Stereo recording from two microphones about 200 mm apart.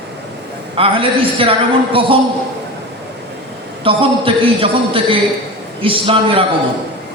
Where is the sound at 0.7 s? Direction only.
25° right (ahead or behind).